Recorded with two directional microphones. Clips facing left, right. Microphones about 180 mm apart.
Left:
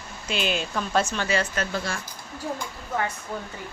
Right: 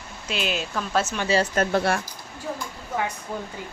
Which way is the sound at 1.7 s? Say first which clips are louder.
Right 8 dB; 60° right (ahead or behind).